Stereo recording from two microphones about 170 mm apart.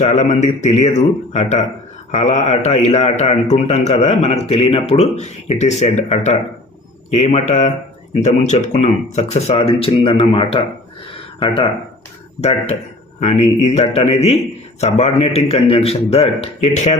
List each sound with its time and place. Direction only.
0.0 s a man's voice: 45° left (ahead or behind)